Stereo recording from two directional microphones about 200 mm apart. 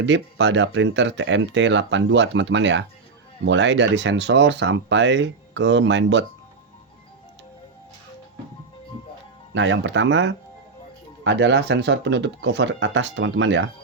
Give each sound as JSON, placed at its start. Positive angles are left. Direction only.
{"t": 0.0, "sound": "speech", "side_deg": -65}
{"t": 9.6, "sound": "speech", "side_deg": -65}